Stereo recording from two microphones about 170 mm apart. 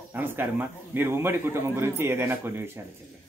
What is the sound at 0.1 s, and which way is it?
A man's voice, 10° right (ahead or behind).